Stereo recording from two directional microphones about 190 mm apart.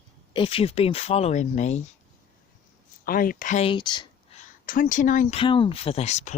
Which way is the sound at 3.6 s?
25° left (ahead or behind).